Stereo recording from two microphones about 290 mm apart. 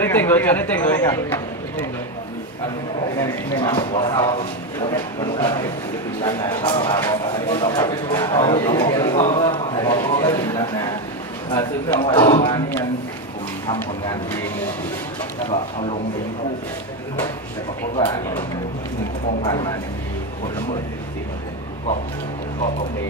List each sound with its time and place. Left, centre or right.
0.0 s speech: centre
3.2 s speech: centre
13.7 s speech: centre
15.5 s speech: centre
17.9 s speech: centre